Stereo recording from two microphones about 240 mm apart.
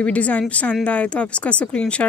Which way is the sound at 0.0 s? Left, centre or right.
Centre.